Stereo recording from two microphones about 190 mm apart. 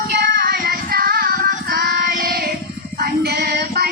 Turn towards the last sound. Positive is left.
turn(degrees=-55)  # may be behind; listen again after turning